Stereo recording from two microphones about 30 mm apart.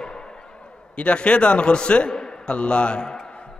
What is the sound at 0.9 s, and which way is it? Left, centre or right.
A man's voice, left.